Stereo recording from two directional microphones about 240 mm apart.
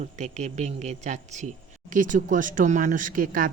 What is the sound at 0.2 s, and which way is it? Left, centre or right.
Speech, right.